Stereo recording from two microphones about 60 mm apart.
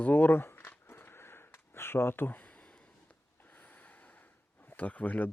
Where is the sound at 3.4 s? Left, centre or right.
Left.